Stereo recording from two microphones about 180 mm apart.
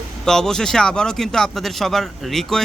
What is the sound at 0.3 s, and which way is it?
Speech, 5° left (ahead or behind).